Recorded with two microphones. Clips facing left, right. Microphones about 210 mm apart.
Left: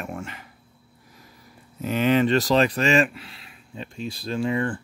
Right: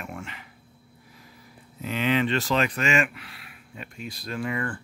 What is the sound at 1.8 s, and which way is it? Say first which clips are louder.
Speech: left 4 dB; 45° left (ahead or behind).